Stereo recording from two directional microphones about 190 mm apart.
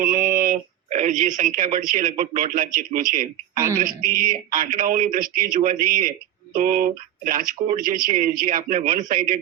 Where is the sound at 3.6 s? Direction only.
15° right (ahead or behind).